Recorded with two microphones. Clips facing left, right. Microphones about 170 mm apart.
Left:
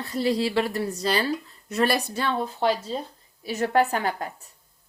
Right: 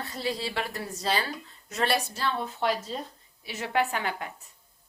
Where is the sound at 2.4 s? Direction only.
30° left (ahead or behind).